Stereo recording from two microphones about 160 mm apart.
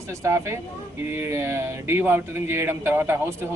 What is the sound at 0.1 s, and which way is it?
A man's voice, 20° right (ahead or behind).